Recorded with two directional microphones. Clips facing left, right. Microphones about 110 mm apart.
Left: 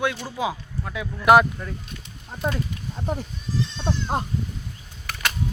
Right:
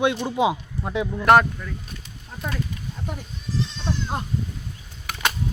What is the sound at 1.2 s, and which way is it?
Speech, 5° left (ahead or behind).